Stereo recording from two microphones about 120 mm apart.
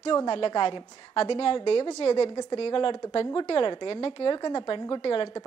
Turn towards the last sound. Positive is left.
turn(degrees=45)  # may be behind; listen again after turning